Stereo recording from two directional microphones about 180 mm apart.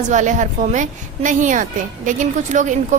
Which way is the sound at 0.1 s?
45° right (ahead or behind).